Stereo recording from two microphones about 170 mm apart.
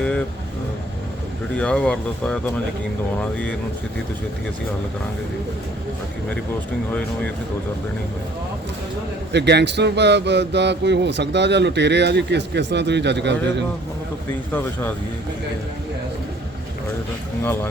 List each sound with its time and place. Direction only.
1.5 s speech: 5° left (ahead or behind)
9.3 s speech: 85° right
17.4 s speech: 15° left (ahead or behind)